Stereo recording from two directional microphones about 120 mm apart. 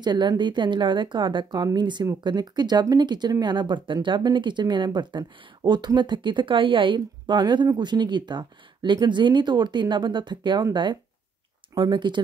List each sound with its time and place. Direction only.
0.0 s speech: 35° right (ahead or behind)